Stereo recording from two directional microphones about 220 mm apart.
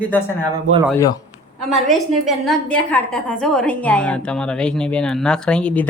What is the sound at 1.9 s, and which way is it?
A woman's voice, centre (ahead or behind).